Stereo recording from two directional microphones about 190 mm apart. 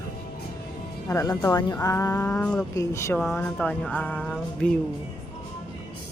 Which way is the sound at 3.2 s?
Centre (ahead or behind).